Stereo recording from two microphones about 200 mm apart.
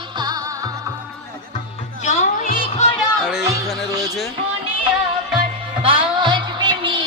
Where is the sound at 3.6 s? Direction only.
Centre (ahead or behind).